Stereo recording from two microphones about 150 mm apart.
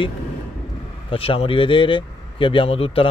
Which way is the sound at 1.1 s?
40° left (ahead or behind).